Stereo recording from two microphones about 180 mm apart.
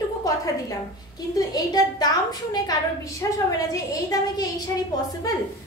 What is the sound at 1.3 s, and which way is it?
A woman's voice, 20° left (ahead or behind).